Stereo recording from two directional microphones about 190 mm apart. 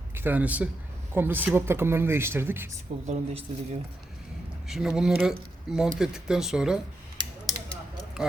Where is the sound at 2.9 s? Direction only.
40° right (ahead or behind).